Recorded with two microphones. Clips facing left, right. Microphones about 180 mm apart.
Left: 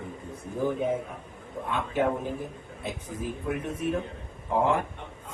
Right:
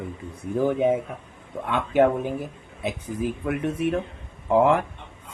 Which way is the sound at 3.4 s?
80° right.